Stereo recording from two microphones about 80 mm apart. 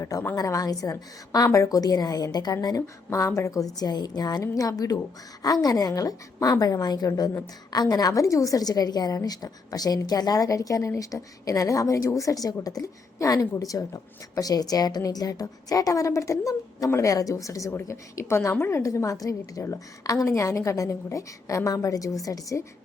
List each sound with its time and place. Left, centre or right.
0.0 s a woman's voice: left
2.8 s a woman's voice: left
18.8 s a woman's voice: left